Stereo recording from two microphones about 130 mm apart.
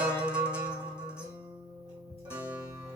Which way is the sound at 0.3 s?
10° right (ahead or behind).